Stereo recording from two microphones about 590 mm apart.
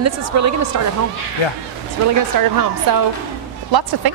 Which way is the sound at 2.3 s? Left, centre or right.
Right.